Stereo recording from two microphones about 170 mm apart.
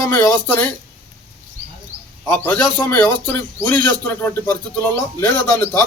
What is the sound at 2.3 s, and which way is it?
A man's voice, 10° left (ahead or behind).